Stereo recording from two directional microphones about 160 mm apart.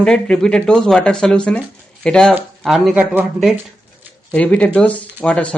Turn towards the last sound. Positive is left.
turn(degrees=10)  # may be behind; listen again after turning